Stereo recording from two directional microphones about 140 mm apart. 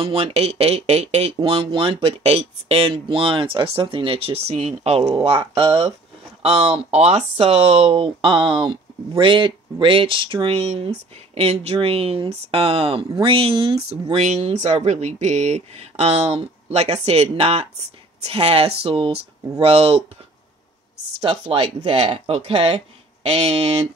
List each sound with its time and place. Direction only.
0.0 s speech: 45° right (ahead or behind)
21.2 s speech: 40° right (ahead or behind)